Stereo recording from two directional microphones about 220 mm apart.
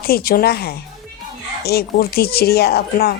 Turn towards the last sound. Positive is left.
turn(degrees=45)  # may be behind; listen again after turning